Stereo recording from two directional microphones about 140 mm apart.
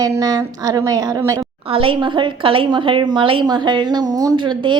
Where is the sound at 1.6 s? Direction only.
40° right (ahead or behind).